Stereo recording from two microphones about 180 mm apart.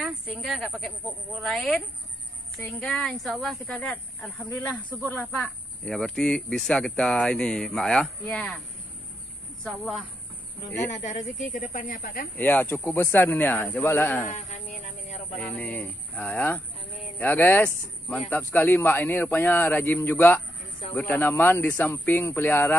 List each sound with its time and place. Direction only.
0.0 s speech: 5° right (ahead or behind)
10.9 s speech: 40° left (ahead or behind)
12.4 s speech: 10° left (ahead or behind)
14.3 s speech: 45° left (ahead or behind)
15.3 s speech: 10° left (ahead or behind)